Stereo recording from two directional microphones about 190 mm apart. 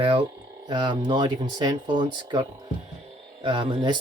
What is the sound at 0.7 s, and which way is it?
Speech, 25° right (ahead or behind).